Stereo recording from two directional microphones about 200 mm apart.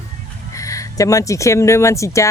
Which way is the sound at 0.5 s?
15° left (ahead or behind).